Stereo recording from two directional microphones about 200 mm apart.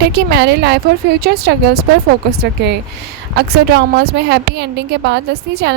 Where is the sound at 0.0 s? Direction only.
55° right (ahead or behind).